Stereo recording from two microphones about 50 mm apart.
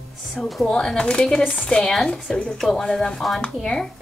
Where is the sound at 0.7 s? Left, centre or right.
Centre.